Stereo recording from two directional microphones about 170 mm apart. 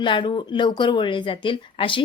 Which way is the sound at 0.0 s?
30° left (ahead or behind).